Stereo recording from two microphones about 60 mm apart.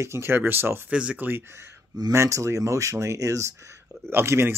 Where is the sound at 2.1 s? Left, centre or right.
Right.